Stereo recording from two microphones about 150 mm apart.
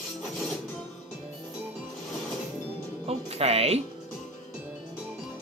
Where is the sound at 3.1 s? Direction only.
40° right (ahead or behind).